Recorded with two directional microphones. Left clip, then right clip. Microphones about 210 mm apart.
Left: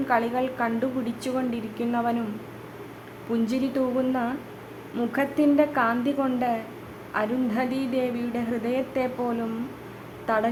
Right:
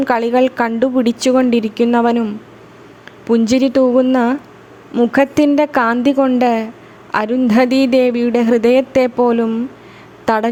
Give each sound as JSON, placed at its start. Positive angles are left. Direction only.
{"t": 0.1, "sound": "a woman's voice", "side_deg": -45}
{"t": 3.3, "sound": "a woman's voice", "side_deg": -45}